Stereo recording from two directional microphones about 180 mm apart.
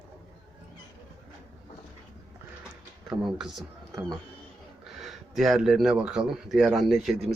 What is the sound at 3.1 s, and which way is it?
Speech, 5° right (ahead or behind).